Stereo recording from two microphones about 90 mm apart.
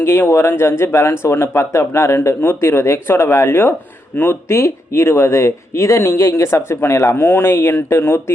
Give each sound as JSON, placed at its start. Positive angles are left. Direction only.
{"t": 0.0, "sound": "speech", "side_deg": 30}